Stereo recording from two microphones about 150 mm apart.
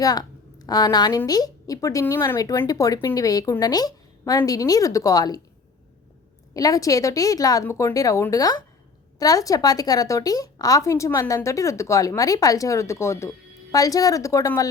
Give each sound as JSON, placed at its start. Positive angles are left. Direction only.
{"t": 0.0, "sound": "a woman's voice", "side_deg": 25}
{"t": 6.5, "sound": "a woman's voice", "side_deg": 25}